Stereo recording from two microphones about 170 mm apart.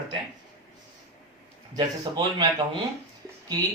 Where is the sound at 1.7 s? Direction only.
25° right (ahead or behind).